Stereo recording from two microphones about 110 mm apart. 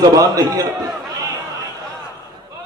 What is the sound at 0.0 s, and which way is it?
Speech, 35° right (ahead or behind).